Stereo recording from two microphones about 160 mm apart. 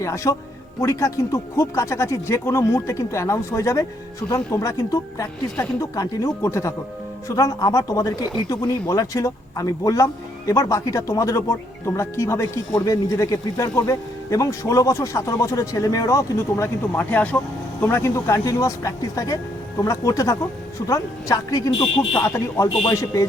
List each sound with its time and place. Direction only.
0.0 s speech: 20° left (ahead or behind)